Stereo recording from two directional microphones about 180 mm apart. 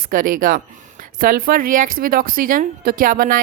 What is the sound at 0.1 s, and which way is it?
Speech, 50° right (ahead or behind).